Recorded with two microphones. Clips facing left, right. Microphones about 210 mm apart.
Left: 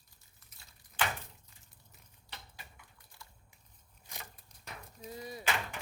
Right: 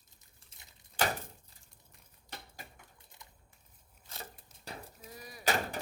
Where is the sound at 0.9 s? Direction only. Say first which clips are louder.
Right 3 dB; 40° right (ahead or behind).